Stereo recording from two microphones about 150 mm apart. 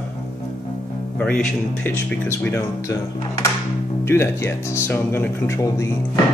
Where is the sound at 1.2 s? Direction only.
10° left (ahead or behind).